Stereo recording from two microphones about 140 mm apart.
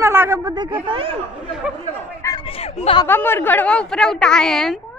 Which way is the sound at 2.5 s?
45° left (ahead or behind).